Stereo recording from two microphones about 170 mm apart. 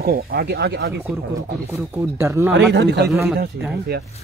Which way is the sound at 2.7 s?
85° right.